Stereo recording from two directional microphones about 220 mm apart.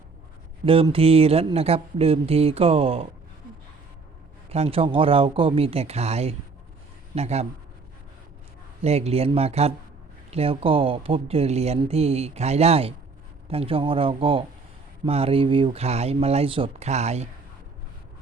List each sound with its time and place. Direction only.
0.6 s speech: 25° right (ahead or behind)
4.4 s speech: 30° right (ahead or behind)
8.8 s speech: 30° right (ahead or behind)